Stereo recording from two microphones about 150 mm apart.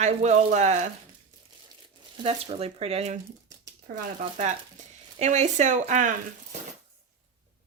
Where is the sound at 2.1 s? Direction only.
40° right (ahead or behind).